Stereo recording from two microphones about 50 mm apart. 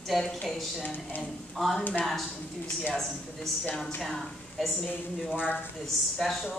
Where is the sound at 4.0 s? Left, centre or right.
Centre.